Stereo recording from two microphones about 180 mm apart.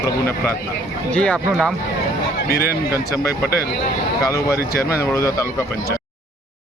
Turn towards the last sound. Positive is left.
turn(degrees=20)  # may be behind; listen again after turning